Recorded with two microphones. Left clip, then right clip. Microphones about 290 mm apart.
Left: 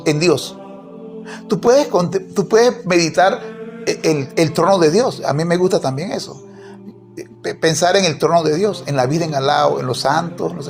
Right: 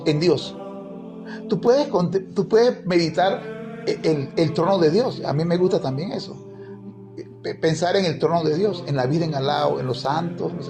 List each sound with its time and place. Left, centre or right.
0.0 s a man's voice: centre